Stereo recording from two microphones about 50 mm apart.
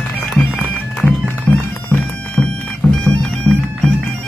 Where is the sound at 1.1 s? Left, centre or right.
Left.